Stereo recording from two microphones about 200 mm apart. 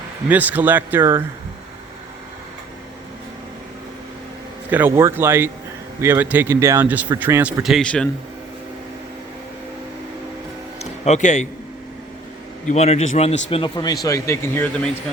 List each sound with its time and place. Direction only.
0.3 s a man's voice: 10° right (ahead or behind)
4.7 s a man's voice: 10° right (ahead or behind); by 8.1 s 5° left (ahead or behind)
10.8 s music: 35° left (ahead or behind)
12.6 s a man's voice: 35° left (ahead or behind); by 14.7 s 10° left (ahead or behind)